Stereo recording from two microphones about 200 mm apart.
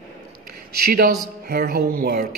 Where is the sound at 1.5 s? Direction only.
50° right (ahead or behind).